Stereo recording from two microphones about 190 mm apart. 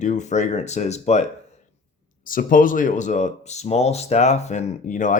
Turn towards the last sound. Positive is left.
turn(degrees=40)  # may be behind; listen again after turning